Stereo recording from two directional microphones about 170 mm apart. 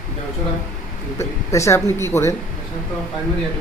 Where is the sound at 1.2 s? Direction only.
15° left (ahead or behind).